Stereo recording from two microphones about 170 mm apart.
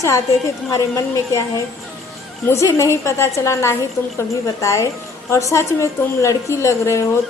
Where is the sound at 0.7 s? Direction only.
20° left (ahead or behind).